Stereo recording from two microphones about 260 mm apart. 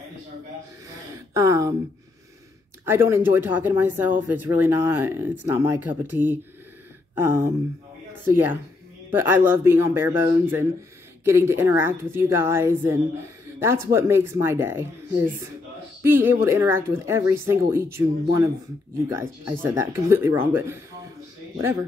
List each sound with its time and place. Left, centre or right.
1.3 s speech: centre
2.8 s speech: centre
19.6 s speech: centre